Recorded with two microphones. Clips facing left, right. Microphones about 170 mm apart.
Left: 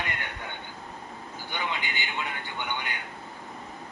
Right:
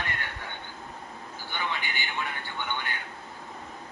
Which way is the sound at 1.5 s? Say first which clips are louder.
Even; 15° left (ahead or behind).